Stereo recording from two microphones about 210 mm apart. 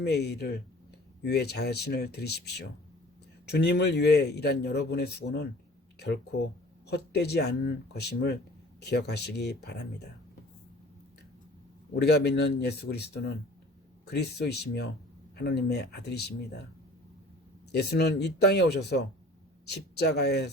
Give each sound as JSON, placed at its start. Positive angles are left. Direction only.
{"t": 0.0, "sound": "speech", "side_deg": 50}
{"t": 6.8, "sound": "speech", "side_deg": 50}
{"t": 11.9, "sound": "speech", "side_deg": 50}
{"t": 17.7, "sound": "speech", "side_deg": 50}